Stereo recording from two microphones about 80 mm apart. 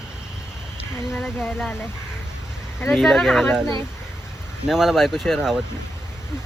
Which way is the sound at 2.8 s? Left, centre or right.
Centre.